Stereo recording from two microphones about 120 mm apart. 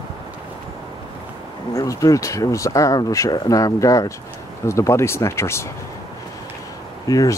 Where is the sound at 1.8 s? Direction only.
30° left (ahead or behind).